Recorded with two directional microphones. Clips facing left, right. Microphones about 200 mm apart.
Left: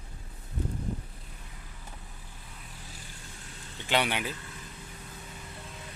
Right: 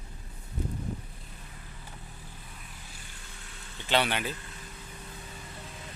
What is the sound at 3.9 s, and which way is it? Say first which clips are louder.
Speech: right 1 dB; 10° left (ahead or behind).